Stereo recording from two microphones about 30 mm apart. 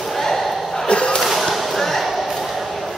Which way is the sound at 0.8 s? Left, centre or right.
Left.